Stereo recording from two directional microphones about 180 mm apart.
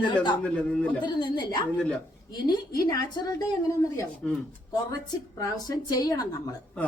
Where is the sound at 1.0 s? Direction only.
25° left (ahead or behind).